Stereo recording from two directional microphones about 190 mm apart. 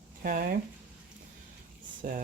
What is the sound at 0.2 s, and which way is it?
Speech, 45° right (ahead or behind).